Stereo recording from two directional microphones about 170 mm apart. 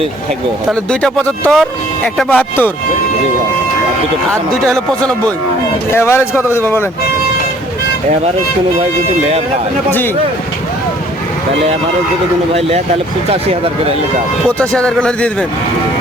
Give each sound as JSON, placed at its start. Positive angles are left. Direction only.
{"t": 0.7, "sound": "speech", "side_deg": 5}
{"t": 5.9, "sound": "speech", "side_deg": 15}
{"t": 13.3, "sound": "speech", "side_deg": -35}
{"t": 14.6, "sound": "speech", "side_deg": 5}